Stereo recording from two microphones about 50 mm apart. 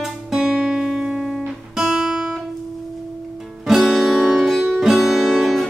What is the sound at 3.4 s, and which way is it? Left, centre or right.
Music, centre.